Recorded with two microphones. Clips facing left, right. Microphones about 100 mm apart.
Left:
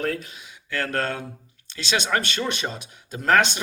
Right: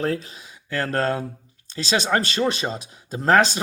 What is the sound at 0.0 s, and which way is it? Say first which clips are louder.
Speech: right 3 dB; 30° right (ahead or behind).